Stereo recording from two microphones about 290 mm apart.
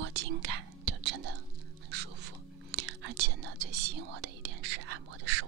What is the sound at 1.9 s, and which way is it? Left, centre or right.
Whispering, right.